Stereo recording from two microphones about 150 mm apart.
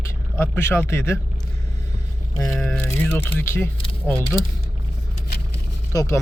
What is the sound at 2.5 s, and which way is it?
Speech, 5° left (ahead or behind).